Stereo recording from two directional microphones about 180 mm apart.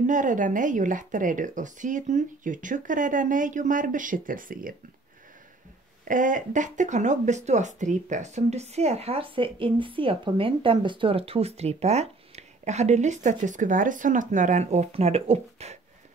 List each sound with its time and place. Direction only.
0.0 s speech: 45° right (ahead or behind)
6.0 s speech: 45° right (ahead or behind)